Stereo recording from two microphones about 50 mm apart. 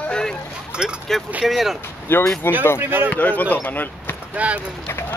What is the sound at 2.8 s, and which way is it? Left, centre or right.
Speech, right.